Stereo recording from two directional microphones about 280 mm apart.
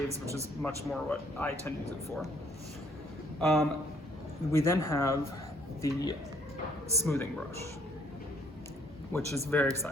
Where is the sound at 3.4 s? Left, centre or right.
Centre.